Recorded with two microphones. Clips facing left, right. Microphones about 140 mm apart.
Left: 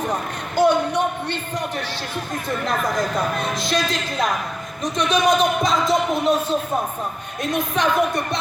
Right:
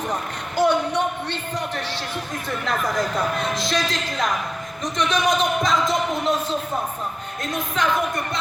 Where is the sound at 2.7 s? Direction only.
20° left (ahead or behind).